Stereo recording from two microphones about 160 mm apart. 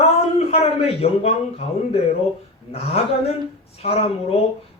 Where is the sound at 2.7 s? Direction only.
40° left (ahead or behind).